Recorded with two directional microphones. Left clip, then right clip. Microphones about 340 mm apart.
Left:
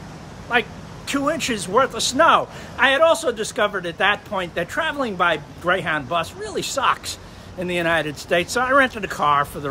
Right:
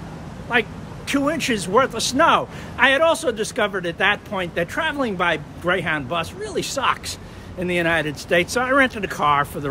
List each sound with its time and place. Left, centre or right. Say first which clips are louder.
0.5 s speech: even; centre